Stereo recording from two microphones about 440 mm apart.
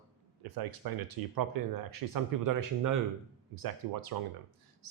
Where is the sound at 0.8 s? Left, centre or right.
Right.